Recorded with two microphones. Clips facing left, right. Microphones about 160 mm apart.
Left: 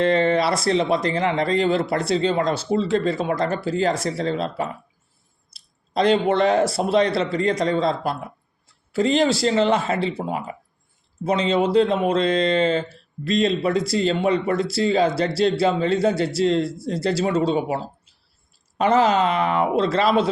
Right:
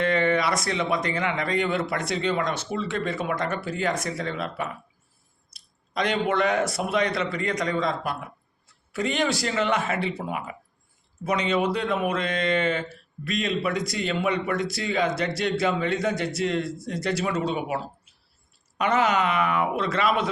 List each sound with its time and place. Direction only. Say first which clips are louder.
0.0 s speech: left 4 dB; 30° left (ahead or behind)